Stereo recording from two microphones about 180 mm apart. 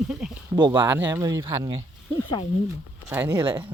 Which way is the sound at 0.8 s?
10° right (ahead or behind).